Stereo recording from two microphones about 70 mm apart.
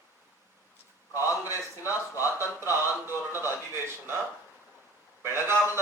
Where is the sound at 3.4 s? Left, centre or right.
Right.